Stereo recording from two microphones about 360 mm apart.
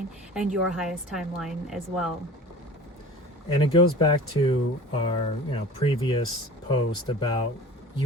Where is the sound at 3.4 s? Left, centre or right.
Centre.